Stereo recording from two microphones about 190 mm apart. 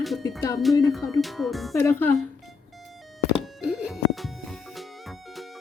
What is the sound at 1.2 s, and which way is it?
Speech, centre (ahead or behind).